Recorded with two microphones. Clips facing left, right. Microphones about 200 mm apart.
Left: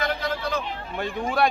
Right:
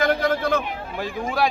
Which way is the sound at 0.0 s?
50° right (ahead or behind).